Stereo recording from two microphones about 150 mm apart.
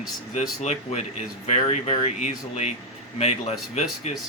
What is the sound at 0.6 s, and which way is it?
Speech, 50° left (ahead or behind).